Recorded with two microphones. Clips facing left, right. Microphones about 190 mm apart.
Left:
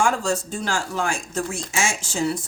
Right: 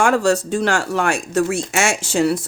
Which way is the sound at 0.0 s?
70° right (ahead or behind).